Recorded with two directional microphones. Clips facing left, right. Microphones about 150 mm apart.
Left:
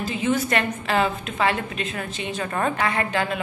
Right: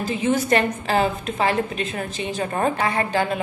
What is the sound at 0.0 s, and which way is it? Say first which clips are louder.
Speech: right 2 dB; 40° right (ahead or behind).